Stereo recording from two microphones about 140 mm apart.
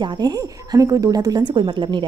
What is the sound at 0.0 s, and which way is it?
A woman's voice, 30° right (ahead or behind).